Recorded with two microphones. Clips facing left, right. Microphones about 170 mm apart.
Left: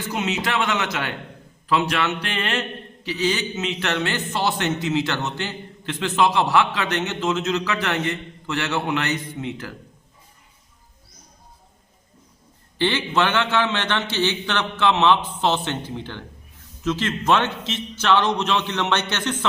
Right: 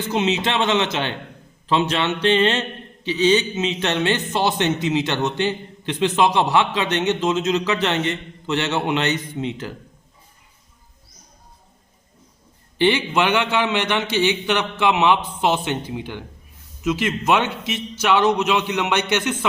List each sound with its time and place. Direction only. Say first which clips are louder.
0.1 s mantra: right 4 dB; 25° right (ahead or behind)
12.8 s a man's voice: right 3 dB; 15° right (ahead or behind)